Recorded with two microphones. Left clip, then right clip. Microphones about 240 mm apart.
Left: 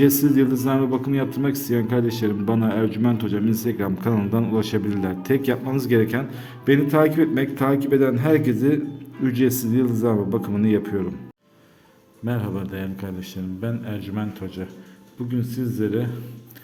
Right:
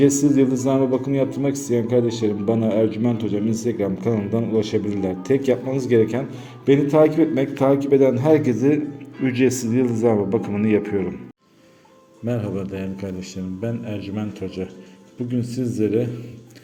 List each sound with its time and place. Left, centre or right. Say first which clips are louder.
0.3 s a man's voice: right 2 dB; centre
12.2 s a man's voice: right 3 dB; centre